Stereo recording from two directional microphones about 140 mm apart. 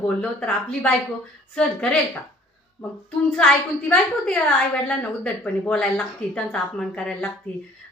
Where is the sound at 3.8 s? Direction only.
10° left (ahead or behind).